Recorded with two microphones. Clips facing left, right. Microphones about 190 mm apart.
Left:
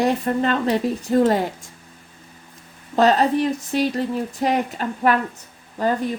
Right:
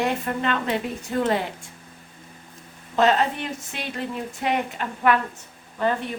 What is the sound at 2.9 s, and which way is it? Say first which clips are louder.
Speech: left 4 dB; 35° left (ahead or behind).